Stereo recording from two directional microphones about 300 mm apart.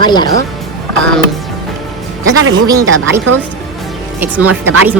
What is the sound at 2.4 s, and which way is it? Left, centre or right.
Speech, right.